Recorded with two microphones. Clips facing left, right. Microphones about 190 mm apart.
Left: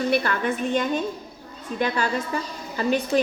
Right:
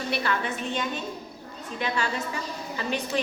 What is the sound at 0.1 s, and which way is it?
A woman's voice, 50° left (ahead or behind).